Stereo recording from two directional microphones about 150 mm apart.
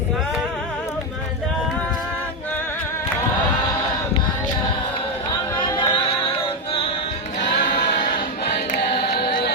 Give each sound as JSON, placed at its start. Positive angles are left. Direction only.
{"t": 5.5, "sound": "music", "side_deg": 35}
{"t": 7.4, "sound": "choir", "side_deg": 60}
{"t": 8.5, "sound": "music", "side_deg": 90}